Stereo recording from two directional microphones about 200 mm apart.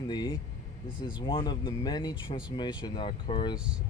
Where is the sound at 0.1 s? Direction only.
20° left (ahead or behind).